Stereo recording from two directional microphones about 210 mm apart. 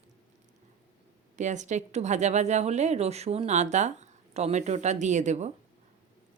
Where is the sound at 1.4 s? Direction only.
35° right (ahead or behind).